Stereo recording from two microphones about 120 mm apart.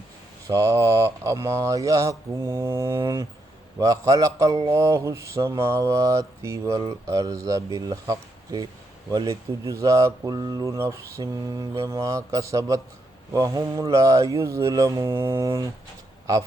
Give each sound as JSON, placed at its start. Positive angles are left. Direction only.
{"t": 0.4, "sound": "speech", "side_deg": -25}